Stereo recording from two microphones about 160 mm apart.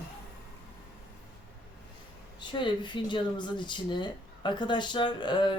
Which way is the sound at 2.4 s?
30° left (ahead or behind).